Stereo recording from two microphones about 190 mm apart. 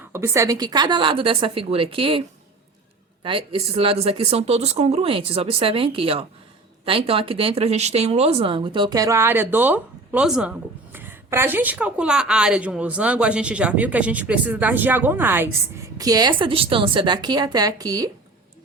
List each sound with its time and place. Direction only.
0.1 s speech: 15° right (ahead or behind)
3.2 s speech: 30° right (ahead or behind)